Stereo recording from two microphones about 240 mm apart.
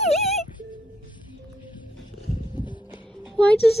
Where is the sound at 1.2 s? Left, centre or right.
Centre.